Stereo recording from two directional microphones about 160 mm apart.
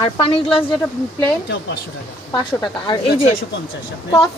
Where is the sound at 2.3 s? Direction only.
25° left (ahead or behind).